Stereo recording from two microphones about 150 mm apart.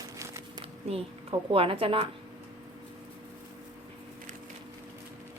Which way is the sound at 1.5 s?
40° right (ahead or behind).